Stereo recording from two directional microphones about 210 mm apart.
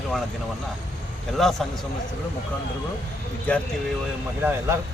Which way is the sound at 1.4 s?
Centre (ahead or behind).